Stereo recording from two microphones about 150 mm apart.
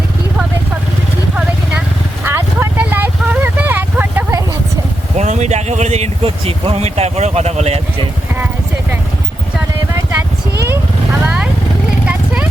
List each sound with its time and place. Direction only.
2.2 s vehicle: 15° right (ahead or behind)
5.1 s speech: 50° right (ahead or behind)
12.0 s a sound: 10° right (ahead or behind)